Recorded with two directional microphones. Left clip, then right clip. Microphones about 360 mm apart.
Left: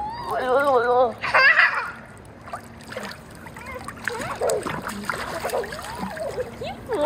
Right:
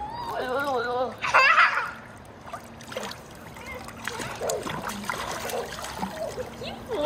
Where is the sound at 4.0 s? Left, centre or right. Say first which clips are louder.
Left 6 dB; centre.